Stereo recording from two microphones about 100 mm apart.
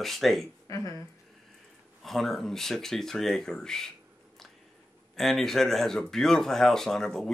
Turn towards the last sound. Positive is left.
turn(degrees=5)  # may be behind; listen again after turning